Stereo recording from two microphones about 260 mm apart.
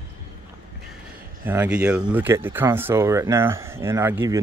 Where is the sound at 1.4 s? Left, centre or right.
Centre.